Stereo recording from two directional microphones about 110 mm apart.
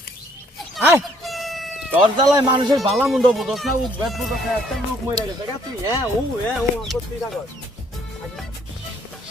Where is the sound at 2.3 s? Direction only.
40° right (ahead or behind).